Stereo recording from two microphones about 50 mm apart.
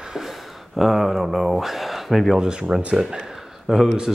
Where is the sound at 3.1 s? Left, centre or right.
Centre.